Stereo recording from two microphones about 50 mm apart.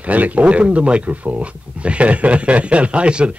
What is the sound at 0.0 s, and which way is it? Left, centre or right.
Speech, right.